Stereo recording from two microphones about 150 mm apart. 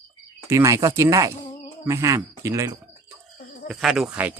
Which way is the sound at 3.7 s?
Centre (ahead or behind).